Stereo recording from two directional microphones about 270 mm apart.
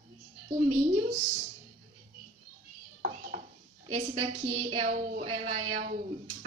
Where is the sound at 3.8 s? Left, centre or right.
Right.